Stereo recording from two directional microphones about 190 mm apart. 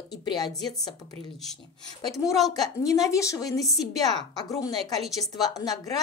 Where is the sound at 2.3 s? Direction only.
Centre (ahead or behind).